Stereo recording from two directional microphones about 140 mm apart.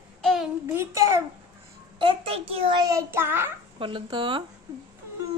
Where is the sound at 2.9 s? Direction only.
20° right (ahead or behind).